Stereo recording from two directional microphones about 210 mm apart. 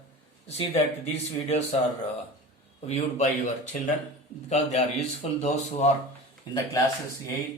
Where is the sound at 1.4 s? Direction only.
30° left (ahead or behind).